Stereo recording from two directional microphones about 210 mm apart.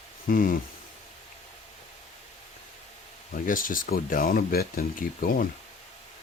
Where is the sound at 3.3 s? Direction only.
40° left (ahead or behind).